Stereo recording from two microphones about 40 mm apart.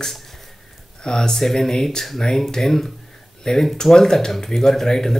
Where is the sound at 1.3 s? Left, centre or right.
Centre.